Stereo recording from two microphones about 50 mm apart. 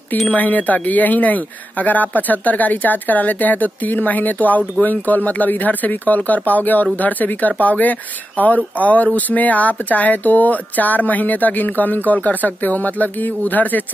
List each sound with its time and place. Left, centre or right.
0.3 s speech: left